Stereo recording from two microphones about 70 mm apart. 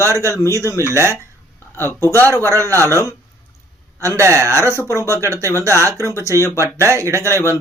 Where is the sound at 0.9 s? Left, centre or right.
Right.